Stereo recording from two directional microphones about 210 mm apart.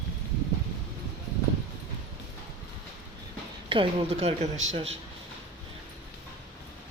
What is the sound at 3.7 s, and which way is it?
Speech, 25° right (ahead or behind).